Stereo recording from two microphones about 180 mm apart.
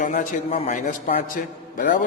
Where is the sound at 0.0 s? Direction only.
45° left (ahead or behind).